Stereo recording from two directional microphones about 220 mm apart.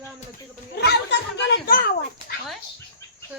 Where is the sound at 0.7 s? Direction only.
50° left (ahead or behind).